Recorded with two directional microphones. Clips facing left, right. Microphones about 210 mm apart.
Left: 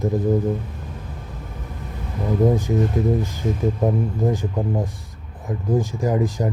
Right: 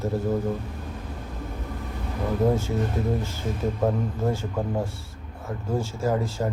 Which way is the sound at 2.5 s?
15° left (ahead or behind).